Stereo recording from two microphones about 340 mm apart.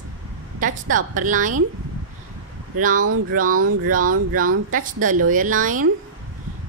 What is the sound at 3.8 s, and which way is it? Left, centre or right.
A woman's voice, right.